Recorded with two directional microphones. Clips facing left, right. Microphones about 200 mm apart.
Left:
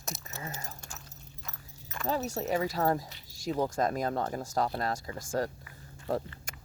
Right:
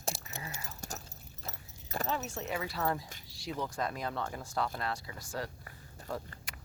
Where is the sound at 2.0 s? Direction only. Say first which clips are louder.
Left 6 dB; 35° left (ahead or behind).